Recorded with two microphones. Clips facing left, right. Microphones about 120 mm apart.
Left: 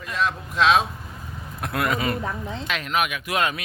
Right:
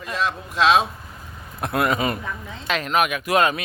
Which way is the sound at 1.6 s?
25° right (ahead or behind).